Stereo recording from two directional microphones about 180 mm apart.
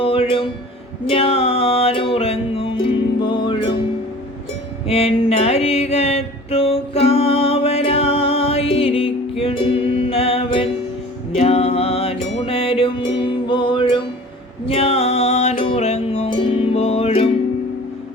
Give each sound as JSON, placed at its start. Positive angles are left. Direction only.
{"t": 0.0, "sound": "music", "side_deg": 30}
{"t": 4.9, "sound": "music", "side_deg": 35}